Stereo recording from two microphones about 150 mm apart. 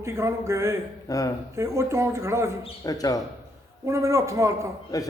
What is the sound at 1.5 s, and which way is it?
Speech, 20° right (ahead or behind).